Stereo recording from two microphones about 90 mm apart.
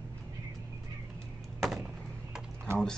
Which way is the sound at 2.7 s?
30° right (ahead or behind).